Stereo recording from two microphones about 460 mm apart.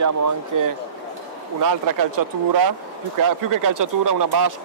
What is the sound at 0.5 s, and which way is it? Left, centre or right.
Speech, right.